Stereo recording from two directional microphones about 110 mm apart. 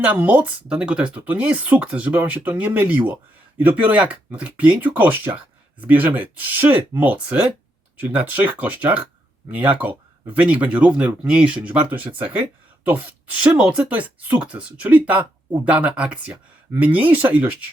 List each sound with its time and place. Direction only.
0.0 s speech: 15° right (ahead or behind)